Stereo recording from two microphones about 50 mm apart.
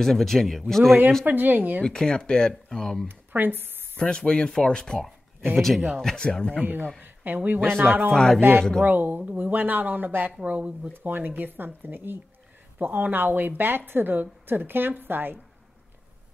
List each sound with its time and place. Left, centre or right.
0.0 s speech: centre
1.2 s a woman's voice: right
1.8 s speech: centre
3.1 s speech: right
4.0 s speech: centre
5.9 s speech: centre
6.1 s speech: centre
6.6 s a woman's voice: right
8.1 s speech: centre
8.4 s a woman's voice: right
10.9 s a woman's voice: right